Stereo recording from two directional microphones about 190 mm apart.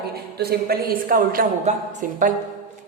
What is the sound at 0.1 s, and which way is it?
Speech, 55° right (ahead or behind).